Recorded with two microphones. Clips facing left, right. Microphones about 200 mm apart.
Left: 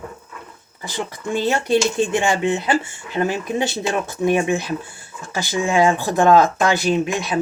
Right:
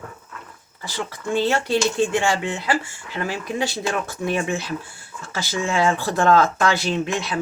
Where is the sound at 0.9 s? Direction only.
15° left (ahead or behind).